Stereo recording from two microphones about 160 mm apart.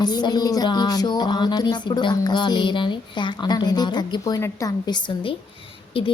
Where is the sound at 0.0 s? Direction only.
25° left (ahead or behind).